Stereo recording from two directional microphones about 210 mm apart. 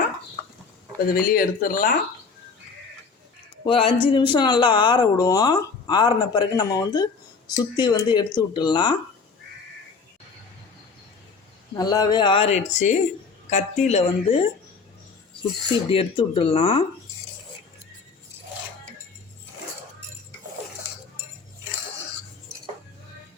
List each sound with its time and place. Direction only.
1.0 s speech: 45° left (ahead or behind)
3.6 s speech: 25° left (ahead or behind)
11.8 s a woman's voice: 20° left (ahead or behind)
15.9 s speech: 25° left (ahead or behind)